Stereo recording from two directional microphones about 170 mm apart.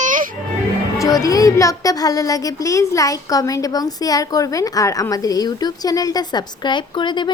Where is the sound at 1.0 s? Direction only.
20° left (ahead or behind).